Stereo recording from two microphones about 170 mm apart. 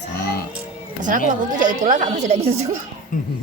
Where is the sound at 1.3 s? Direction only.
50° right (ahead or behind).